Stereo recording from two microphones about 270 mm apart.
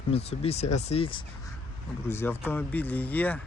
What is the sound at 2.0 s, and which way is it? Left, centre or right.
Speech, centre.